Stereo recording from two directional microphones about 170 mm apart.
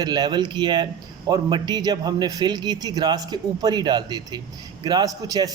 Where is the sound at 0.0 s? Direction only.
25° right (ahead or behind).